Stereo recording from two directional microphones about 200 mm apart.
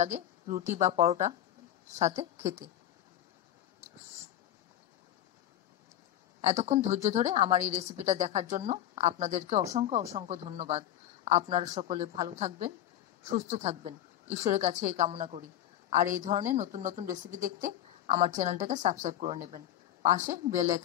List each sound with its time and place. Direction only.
0.0 s a woman's voice: 35° right (ahead or behind)
6.4 s a woman's voice: 35° right (ahead or behind)